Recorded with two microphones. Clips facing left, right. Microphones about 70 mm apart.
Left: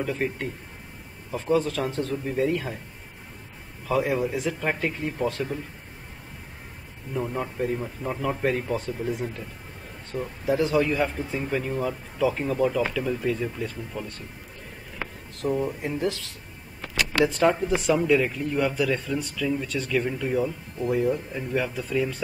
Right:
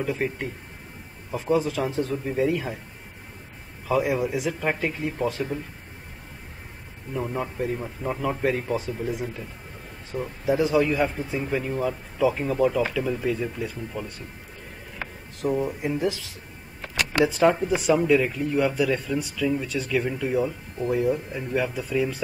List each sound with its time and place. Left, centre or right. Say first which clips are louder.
0.0 s speech: right 1 dB; centre
3.8 s speech: right 1 dB; centre
7.2 s speech: even; centre
15.4 s speech: right 1 dB; centre